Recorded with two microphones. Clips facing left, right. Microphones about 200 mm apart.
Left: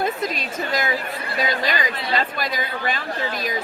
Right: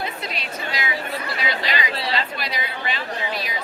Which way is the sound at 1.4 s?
45° left (ahead or behind).